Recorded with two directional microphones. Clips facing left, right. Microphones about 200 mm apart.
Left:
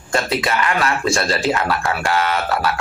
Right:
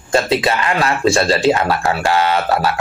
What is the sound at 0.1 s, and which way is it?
Speech, 25° right (ahead or behind).